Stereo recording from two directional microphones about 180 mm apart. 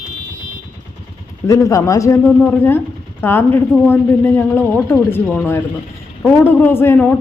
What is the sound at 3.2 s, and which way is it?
A man's voice, 10° left (ahead or behind).